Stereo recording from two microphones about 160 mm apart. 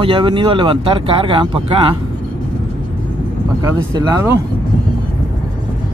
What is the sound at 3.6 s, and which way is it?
Speech, 20° right (ahead or behind).